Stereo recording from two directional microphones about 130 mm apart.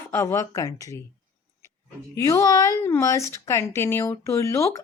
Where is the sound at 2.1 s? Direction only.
25° left (ahead or behind).